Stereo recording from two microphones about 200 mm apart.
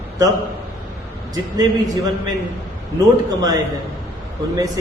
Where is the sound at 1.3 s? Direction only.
20° right (ahead or behind).